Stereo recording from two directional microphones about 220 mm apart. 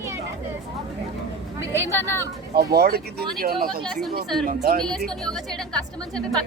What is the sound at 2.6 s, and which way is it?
Speech, 45° right (ahead or behind).